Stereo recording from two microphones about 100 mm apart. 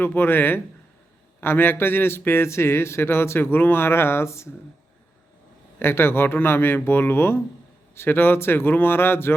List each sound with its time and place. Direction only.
0.0 s a man's voice: 20° left (ahead or behind)
5.8 s a man's voice: 25° left (ahead or behind)